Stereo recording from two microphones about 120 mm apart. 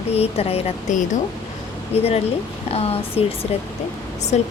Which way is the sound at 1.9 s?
55° left (ahead or behind).